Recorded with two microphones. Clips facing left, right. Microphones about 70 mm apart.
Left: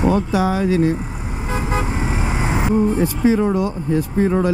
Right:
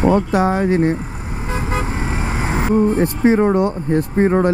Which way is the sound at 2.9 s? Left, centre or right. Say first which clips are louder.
Right 2 dB; right.